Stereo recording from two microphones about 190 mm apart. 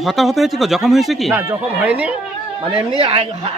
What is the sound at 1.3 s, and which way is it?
Speech, 10° right (ahead or behind).